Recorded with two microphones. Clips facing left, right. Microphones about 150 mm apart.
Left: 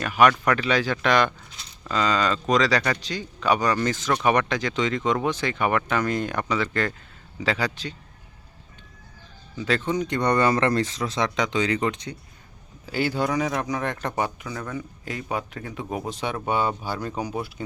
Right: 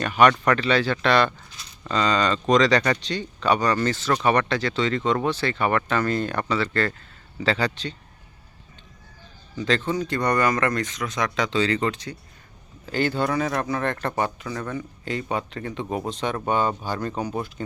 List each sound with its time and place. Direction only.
0.0 s speech: 5° left (ahead or behind)
9.6 s speech: 10° left (ahead or behind)